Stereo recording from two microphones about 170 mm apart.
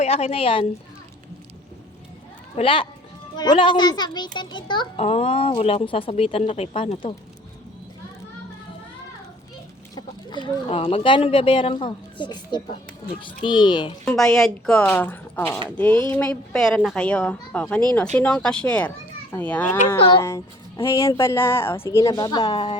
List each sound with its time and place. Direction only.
0.0 s speech: 35° left (ahead or behind)
2.6 s a child's voice: 30° left (ahead or behind)
4.9 s speech: 40° left (ahead or behind)
9.9 s a child's voice: 25° left (ahead or behind)
14.0 s a child's voice: 5° left (ahead or behind)
20.0 s a child's voice: 30° left (ahead or behind)
20.2 s a child's voice: 15° left (ahead or behind)